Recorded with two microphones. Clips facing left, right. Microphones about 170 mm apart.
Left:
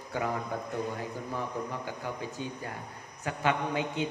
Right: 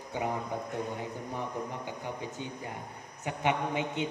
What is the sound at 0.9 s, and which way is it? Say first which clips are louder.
A man's voice: left 1 dB; 20° right (ahead or behind).